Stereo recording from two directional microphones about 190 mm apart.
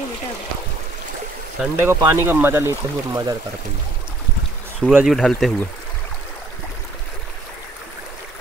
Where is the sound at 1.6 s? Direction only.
15° right (ahead or behind).